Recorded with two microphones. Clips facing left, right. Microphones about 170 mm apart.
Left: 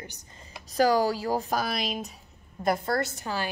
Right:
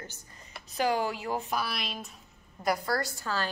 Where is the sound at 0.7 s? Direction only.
40° left (ahead or behind).